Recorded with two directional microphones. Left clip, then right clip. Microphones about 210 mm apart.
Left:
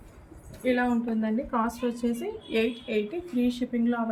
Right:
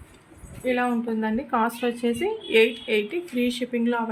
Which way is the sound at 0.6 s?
35° right (ahead or behind).